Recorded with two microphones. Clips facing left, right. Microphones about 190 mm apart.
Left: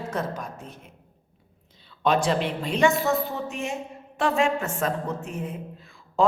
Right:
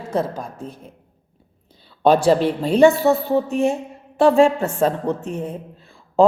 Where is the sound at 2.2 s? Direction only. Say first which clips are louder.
Right 9 dB; 35° right (ahead or behind).